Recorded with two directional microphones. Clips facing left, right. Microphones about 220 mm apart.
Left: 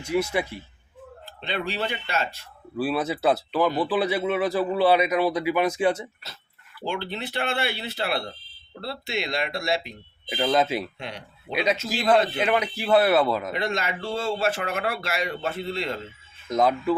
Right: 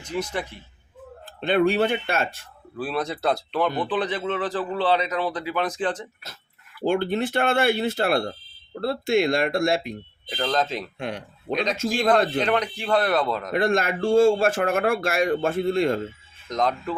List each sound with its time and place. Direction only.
0.0 s speech: 10° left (ahead or behind)
1.2 s speech: 50° right (ahead or behind)
2.7 s speech: 5° left (ahead or behind)
6.8 s speech: 50° right (ahead or behind)
10.2 s speech: 10° left (ahead or behind)
10.9 s speech: 50° right (ahead or behind)
11.5 s speech: 5° left (ahead or behind)
13.5 s speech: 50° right (ahead or behind)
16.5 s speech: 5° left (ahead or behind)